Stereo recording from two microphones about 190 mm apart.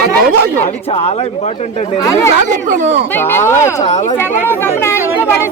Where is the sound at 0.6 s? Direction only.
30° left (ahead or behind).